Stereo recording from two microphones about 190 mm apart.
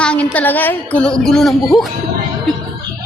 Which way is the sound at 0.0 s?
5° left (ahead or behind).